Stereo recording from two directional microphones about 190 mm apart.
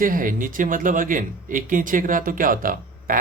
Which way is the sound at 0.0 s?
45° right (ahead or behind).